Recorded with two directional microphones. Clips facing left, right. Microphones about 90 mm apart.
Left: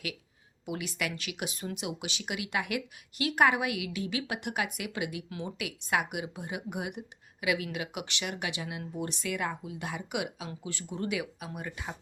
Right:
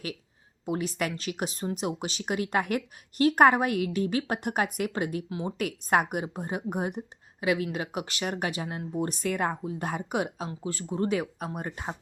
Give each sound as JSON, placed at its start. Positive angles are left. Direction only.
{"t": 0.6, "sound": "a woman's voice", "side_deg": -35}